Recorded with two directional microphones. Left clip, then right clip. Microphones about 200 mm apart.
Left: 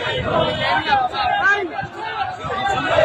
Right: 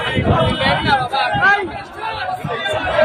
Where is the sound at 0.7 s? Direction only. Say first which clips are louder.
Right 2 dB; 60° right (ahead or behind).